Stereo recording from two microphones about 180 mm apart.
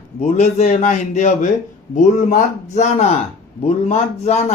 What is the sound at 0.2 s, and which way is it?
A man's voice, 40° left (ahead or behind).